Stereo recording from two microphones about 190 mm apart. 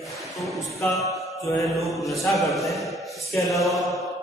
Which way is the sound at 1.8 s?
Centre (ahead or behind).